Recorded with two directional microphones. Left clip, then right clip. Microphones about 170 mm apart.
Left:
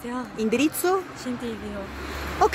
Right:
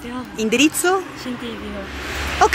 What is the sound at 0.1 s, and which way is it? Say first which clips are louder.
Speech: right 5 dB; 5° left (ahead or behind).